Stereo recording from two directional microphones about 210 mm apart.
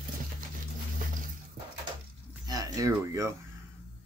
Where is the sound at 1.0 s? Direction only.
40° right (ahead or behind).